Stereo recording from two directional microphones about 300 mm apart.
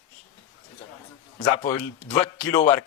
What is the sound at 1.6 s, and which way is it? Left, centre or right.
A man's voice, centre.